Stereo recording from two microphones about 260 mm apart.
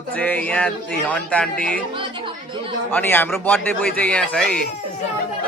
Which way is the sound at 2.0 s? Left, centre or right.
Centre.